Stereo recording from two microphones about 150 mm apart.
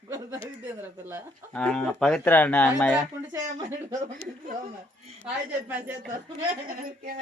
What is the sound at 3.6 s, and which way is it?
Speech, 55° right (ahead or behind).